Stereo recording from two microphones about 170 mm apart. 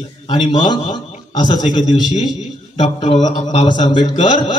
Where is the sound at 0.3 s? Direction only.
25° left (ahead or behind).